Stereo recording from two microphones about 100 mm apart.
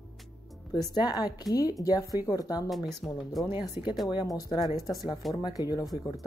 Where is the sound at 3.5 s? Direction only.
45° left (ahead or behind).